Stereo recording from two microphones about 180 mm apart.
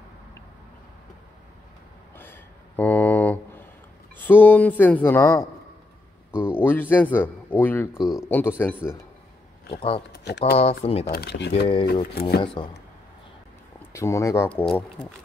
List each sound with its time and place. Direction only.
2.1 s a sound: 10° left (ahead or behind)
4.2 s speech: 10° left (ahead or behind)
6.3 s speech: 5° right (ahead or behind)
6.6 s speech: 10° left (ahead or behind)
9.8 s speech: 30° left (ahead or behind)
10.1 s speech: 70° left (ahead or behind)
10.6 s speech: 35° left (ahead or behind)
11.1 s speech: 65° left (ahead or behind)
12.6 s a man's voice: 30° left (ahead or behind)
13.9 s speech: 15° left (ahead or behind)